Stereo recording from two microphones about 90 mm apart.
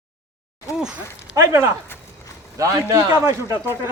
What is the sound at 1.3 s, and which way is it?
Speech, 35° right (ahead or behind).